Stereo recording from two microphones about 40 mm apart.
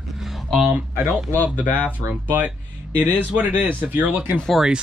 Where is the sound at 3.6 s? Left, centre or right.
Right.